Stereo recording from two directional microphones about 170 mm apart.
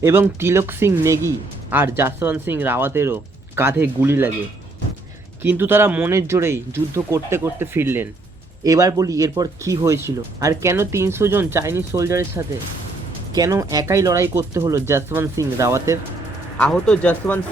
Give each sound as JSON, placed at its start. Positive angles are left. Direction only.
{"t": 0.0, "sound": "speech", "side_deg": -15}
{"t": 5.4, "sound": "speech", "side_deg": -15}
{"t": 13.3, "sound": "speech", "side_deg": -20}
{"t": 16.6, "sound": "speech", "side_deg": 5}